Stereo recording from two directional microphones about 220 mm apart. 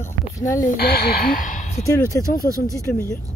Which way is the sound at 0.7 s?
45° left (ahead or behind).